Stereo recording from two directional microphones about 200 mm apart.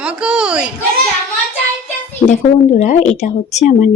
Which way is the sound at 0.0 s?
5° right (ahead or behind).